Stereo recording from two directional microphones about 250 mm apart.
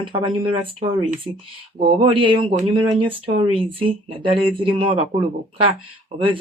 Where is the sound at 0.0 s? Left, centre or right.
Centre.